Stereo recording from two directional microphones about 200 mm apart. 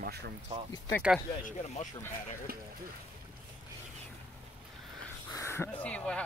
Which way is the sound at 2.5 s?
50° right (ahead or behind).